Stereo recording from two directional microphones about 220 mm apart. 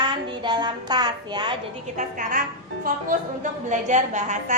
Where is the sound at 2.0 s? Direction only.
35° right (ahead or behind).